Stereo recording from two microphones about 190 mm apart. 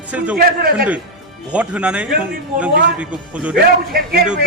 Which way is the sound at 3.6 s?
55° right (ahead or behind).